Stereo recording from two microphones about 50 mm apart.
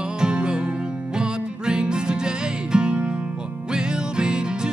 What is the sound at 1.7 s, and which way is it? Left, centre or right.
Music, centre.